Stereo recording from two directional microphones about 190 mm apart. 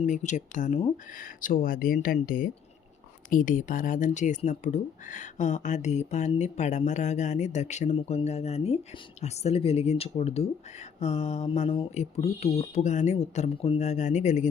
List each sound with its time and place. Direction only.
0.0 s speech: 40° left (ahead or behind)